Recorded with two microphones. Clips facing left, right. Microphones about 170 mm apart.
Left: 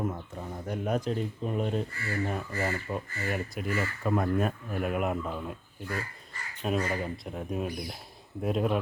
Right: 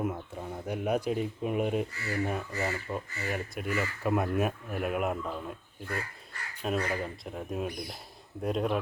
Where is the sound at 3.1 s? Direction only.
50° left (ahead or behind).